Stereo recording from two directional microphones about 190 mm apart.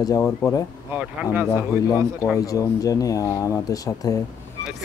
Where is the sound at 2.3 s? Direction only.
15° left (ahead or behind).